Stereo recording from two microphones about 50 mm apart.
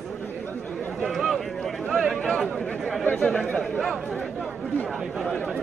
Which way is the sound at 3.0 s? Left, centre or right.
Left.